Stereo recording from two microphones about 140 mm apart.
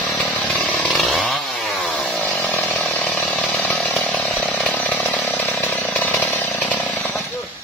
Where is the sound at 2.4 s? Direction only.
15° left (ahead or behind).